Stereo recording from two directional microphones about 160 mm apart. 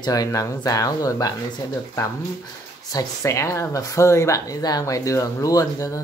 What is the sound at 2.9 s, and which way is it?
A woman's voice, 20° left (ahead or behind).